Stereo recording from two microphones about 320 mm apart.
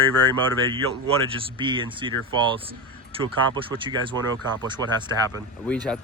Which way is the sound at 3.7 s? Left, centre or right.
Centre.